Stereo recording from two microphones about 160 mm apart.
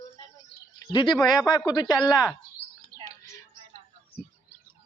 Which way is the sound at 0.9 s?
30° left (ahead or behind).